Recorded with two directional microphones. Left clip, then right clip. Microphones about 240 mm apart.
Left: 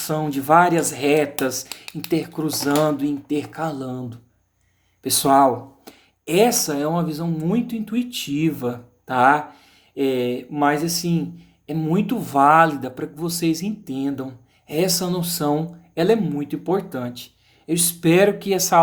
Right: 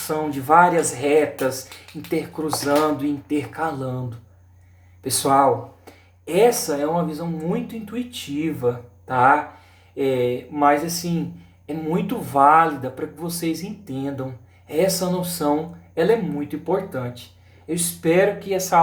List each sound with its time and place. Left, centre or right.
0.1 s speech: left
5.0 s speech: left